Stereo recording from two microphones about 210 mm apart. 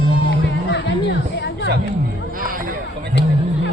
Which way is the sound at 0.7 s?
55° left (ahead or behind).